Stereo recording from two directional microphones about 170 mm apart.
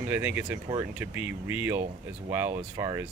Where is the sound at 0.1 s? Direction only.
10° right (ahead or behind).